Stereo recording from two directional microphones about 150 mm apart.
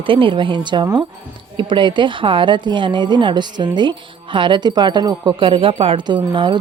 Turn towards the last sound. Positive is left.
turn(degrees=-30)  # may be behind; listen again after turning